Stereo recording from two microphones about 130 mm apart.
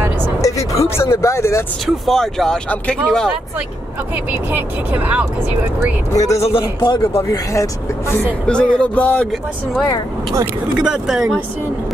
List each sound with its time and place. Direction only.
0.4 s vehicle: 25° left (ahead or behind)
1.9 s speech: centre (ahead or behind)
4.5 s speech: 15° right (ahead or behind)
6.1 s speech: 25° left (ahead or behind)
6.4 s a man's voice: 45° left (ahead or behind)
7.0 s speech: 20° left (ahead or behind)
8.5 s speech: 5° left (ahead or behind)
10.8 s speech: 5° right (ahead or behind)